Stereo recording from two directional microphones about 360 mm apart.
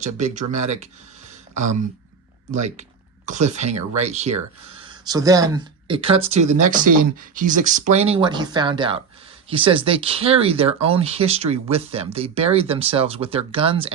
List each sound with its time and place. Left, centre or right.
0.0 s speech: centre
2.5 s speech: centre